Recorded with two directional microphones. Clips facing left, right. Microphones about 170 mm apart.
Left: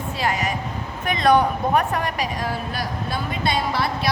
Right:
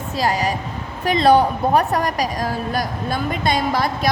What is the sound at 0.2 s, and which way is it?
A woman's voice, 35° right (ahead or behind).